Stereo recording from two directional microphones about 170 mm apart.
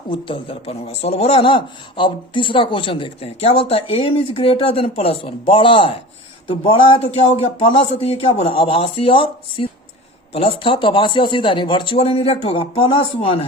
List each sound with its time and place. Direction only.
0.1 s a man's voice: 30° left (ahead or behind)